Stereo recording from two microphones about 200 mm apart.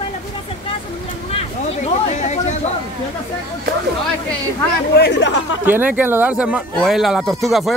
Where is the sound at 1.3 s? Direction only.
30° left (ahead or behind).